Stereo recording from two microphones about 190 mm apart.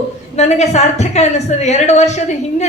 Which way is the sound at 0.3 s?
35° left (ahead or behind).